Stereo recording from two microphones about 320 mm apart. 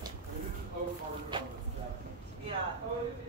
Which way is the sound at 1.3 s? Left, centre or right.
Centre.